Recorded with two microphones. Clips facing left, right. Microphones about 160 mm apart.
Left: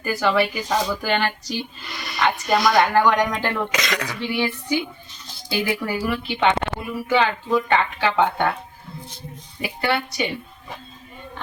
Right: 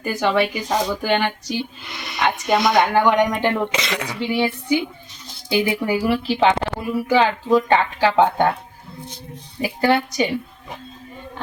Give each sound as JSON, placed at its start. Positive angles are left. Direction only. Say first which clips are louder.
{"t": 0.0, "sound": "speech", "louder": "right 1 dB", "side_deg": -20}
{"t": 5.5, "sound": "speech", "louder": "right 4 dB", "side_deg": -20}
{"t": 6.2, "sound": "speech", "louder": "right 3 dB", "side_deg": -35}
{"t": 9.6, "sound": "a woman's voice", "louder": "right 5 dB", "side_deg": -40}